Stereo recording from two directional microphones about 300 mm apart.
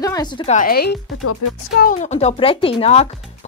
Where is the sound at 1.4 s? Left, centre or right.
Left.